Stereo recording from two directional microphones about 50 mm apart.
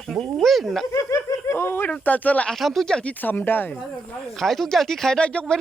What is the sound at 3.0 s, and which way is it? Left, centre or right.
Speech, left.